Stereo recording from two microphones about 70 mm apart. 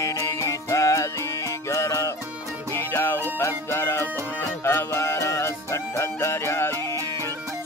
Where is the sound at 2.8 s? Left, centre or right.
Left.